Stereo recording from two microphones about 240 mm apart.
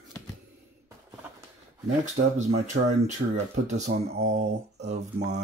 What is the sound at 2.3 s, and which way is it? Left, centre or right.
Speech, right.